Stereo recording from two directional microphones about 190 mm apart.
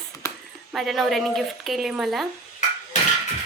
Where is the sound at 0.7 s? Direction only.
Centre (ahead or behind).